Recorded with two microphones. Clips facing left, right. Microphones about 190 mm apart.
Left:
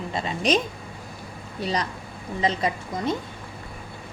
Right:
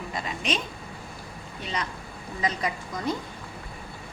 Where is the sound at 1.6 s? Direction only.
35° left (ahead or behind).